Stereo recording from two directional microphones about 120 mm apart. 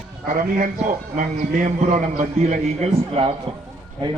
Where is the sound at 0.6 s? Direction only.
90° right; by 3.3 s 60° right (ahead or behind).